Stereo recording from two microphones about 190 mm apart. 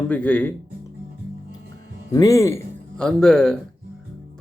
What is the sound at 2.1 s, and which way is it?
Speech, 15° left (ahead or behind).